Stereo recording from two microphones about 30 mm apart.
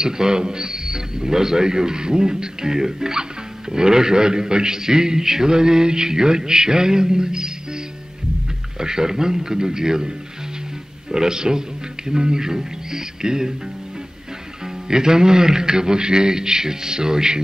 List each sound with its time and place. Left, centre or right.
0.0 s a man's voice: right
14.9 s a man's voice: right